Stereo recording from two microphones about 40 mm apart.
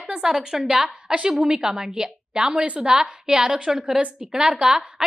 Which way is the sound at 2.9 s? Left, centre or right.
Centre.